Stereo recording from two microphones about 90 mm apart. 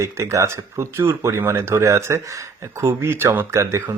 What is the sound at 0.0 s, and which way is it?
Speech, 35° right (ahead or behind).